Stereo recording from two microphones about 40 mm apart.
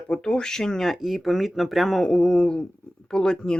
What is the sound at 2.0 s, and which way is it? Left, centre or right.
Speech, centre.